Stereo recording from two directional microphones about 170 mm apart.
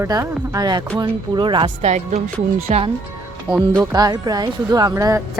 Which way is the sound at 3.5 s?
10° right (ahead or behind).